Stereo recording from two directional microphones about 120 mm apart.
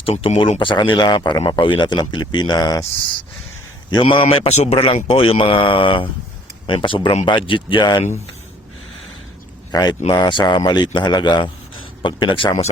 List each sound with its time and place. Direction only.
0.0 s speech: 60° left (ahead or behind); by 2.8 s 35° left (ahead or behind)
4.0 s speech: 50° left (ahead or behind)
9.7 s speech: 30° left (ahead or behind)